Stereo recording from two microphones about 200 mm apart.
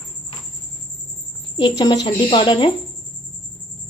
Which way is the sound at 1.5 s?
20° left (ahead or behind).